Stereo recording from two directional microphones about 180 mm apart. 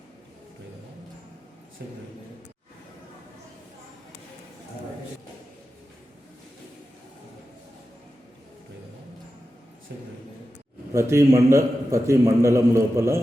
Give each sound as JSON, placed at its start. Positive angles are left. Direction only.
{"t": 9.9, "sound": "speech", "side_deg": -70}
{"t": 10.9, "sound": "a man's voice", "side_deg": -15}